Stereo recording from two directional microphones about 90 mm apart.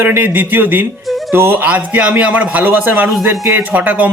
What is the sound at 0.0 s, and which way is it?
A man's voice, 20° right (ahead or behind).